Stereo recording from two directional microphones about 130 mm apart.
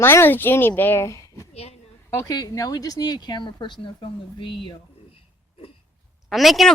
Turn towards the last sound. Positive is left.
turn(degrees=0)  # may be behind; listen again after turning